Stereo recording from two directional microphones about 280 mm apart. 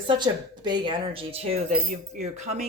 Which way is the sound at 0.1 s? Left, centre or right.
Centre.